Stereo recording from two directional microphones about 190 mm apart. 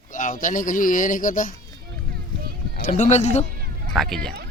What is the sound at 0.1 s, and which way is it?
Speech, 45° left (ahead or behind).